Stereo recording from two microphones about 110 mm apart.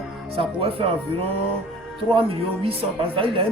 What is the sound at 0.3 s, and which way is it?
Speech, 60° right (ahead or behind).